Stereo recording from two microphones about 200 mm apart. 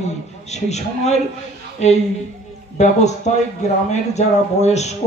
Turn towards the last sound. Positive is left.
turn(degrees=35)  # may be behind; listen again after turning